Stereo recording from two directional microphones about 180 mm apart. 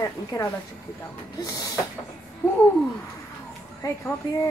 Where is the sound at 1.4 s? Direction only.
20° left (ahead or behind).